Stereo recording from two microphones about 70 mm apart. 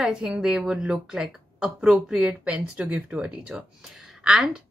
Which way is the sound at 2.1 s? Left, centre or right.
Centre.